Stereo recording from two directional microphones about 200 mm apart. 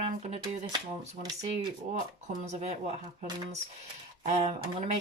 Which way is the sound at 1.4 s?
35° right (ahead or behind).